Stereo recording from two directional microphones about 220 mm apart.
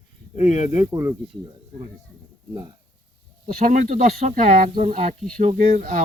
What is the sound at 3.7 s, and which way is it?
Speech, 35° right (ahead or behind).